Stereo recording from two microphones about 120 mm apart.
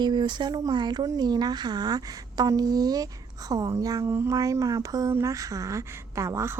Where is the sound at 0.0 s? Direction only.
40° right (ahead or behind).